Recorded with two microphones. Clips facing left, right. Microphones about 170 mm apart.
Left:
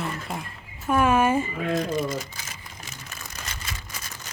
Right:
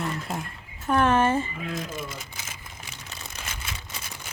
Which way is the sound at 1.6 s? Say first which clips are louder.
Left 8 dB; 55° left (ahead or behind).